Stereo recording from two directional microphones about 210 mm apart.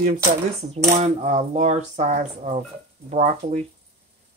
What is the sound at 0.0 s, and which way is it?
Speech, 40° right (ahead or behind).